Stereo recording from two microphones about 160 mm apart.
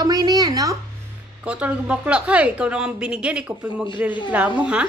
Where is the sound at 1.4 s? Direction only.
10° right (ahead or behind).